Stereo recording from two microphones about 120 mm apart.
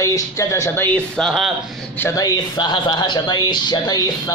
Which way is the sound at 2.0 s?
30° left (ahead or behind).